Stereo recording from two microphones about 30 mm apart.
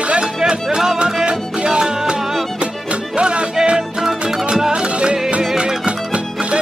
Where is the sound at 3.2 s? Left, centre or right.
Right.